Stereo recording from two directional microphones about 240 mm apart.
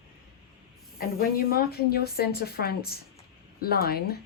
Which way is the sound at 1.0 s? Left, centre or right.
Left.